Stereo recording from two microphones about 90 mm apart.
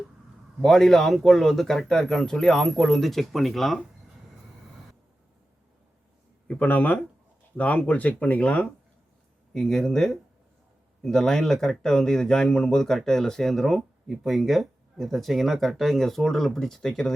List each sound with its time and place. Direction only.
0.6 s speech: 5° left (ahead or behind)
6.5 s speech: 15° left (ahead or behind)